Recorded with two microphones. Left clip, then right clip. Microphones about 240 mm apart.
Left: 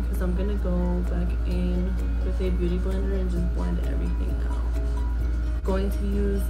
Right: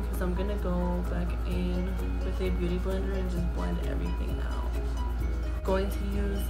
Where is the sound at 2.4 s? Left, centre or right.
Centre.